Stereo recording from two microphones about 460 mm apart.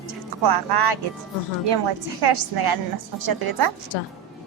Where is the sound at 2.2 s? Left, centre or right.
Right.